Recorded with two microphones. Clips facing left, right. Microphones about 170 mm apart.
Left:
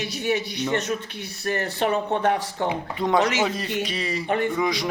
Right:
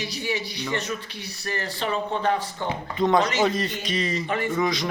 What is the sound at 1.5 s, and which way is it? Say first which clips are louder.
Speech: left 5 dB; 55° left (ahead or behind).